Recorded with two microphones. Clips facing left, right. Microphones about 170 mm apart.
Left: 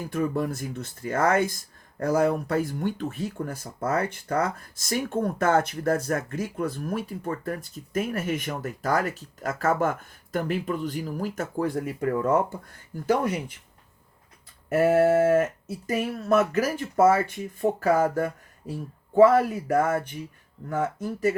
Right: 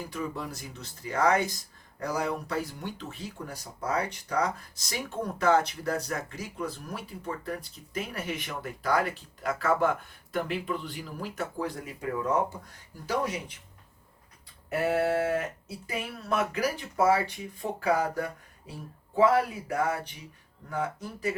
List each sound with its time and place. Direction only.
0.1 s speech: 50° left (ahead or behind)
14.7 s speech: 45° left (ahead or behind)